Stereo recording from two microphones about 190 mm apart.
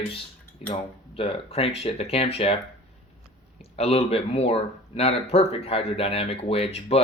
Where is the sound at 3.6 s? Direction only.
35° left (ahead or behind).